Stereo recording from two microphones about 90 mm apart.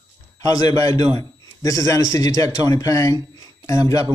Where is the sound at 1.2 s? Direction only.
40° left (ahead or behind).